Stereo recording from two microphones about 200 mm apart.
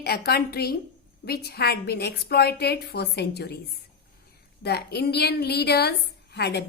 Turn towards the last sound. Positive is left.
turn(degrees=55)  # may be behind; listen again after turning